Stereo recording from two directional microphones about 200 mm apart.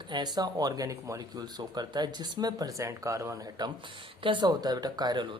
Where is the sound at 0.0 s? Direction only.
20° right (ahead or behind).